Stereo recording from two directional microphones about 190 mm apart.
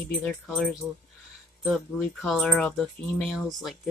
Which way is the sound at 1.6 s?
Centre (ahead or behind).